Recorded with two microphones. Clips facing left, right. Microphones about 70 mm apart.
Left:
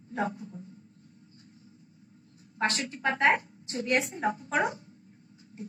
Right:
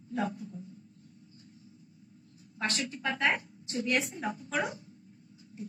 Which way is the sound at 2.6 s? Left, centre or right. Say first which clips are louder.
Left 4 dB; left.